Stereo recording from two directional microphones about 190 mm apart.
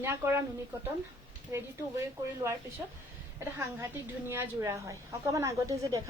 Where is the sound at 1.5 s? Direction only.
15° right (ahead or behind).